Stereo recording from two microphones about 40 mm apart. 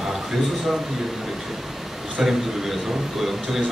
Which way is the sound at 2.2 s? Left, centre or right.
Centre.